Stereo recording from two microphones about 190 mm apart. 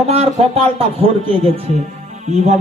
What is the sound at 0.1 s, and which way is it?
A man's voice, 30° right (ahead or behind).